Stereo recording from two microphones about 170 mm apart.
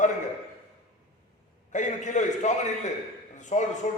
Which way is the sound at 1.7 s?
45° left (ahead or behind).